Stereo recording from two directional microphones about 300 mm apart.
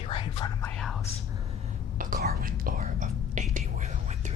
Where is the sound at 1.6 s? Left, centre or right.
Right.